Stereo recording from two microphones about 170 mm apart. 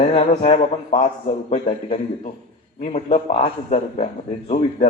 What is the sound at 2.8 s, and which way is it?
A man's voice, 40° left (ahead or behind).